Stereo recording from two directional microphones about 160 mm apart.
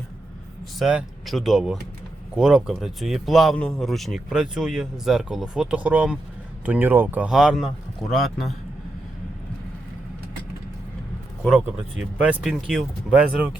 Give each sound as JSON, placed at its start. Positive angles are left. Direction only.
{"t": 0.8, "sound": "speech", "side_deg": -5}
{"t": 11.4, "sound": "speech", "side_deg": -5}